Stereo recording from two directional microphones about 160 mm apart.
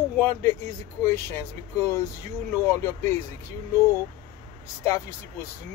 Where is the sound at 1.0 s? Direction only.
15° left (ahead or behind).